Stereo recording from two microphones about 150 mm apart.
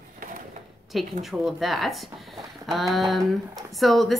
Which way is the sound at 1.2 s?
Centre (ahead or behind).